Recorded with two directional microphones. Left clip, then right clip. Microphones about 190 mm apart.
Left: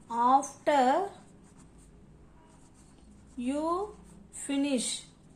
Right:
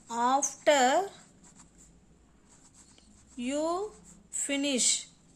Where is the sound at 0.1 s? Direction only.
45° right (ahead or behind).